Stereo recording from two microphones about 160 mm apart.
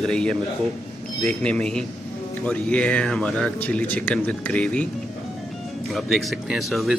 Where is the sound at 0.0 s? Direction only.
5° left (ahead or behind).